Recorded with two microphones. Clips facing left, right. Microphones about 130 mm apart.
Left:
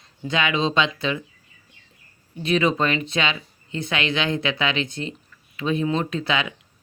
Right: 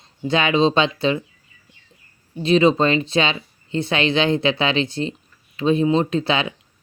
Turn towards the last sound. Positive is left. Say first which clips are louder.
# right 4 dB
turn(degrees=-30)  # may be behind; listen again after turning